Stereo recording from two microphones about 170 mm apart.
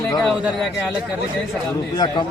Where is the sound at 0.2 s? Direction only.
Centre (ahead or behind).